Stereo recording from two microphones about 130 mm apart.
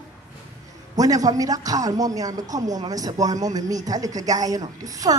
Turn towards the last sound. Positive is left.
turn(degrees=-25)  # may be behind; listen again after turning